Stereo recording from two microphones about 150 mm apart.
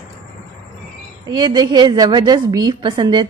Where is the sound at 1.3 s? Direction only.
30° right (ahead or behind).